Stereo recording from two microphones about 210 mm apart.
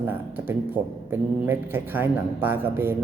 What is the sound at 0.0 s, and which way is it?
A man's voice, 10° right (ahead or behind).